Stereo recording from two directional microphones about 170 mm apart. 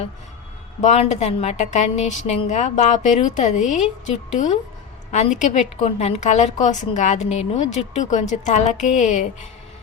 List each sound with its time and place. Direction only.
0.8 s a woman's voice: 40° left (ahead or behind)